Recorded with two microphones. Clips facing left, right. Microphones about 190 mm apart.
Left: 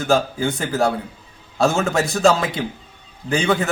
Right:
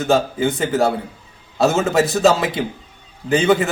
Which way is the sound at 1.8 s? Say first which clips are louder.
Right 3 dB; 5° right (ahead or behind).